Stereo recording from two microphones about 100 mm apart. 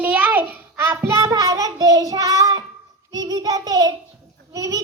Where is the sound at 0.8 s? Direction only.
25° right (ahead or behind).